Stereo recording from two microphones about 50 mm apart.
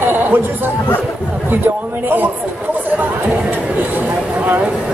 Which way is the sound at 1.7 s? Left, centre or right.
Right.